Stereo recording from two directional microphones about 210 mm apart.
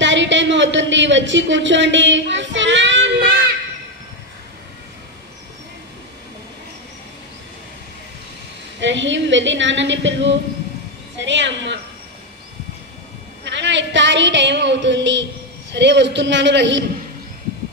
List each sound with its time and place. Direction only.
0.0 s speech: 60° right (ahead or behind)
8.7 s a woman's voice: 60° right (ahead or behind)
13.4 s a woman's voice: 60° right (ahead or behind)